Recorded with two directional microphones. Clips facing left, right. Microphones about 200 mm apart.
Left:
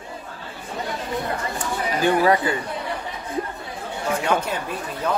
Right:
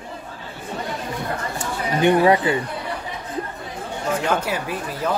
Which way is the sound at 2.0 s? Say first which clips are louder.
Right 3 dB; 25° right (ahead or behind).